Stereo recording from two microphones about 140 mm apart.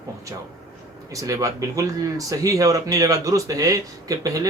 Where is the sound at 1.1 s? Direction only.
25° right (ahead or behind).